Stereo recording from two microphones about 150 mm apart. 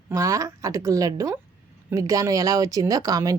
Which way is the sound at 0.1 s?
20° right (ahead or behind).